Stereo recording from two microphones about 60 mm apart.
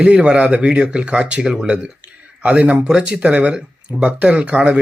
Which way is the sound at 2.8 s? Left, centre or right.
Centre.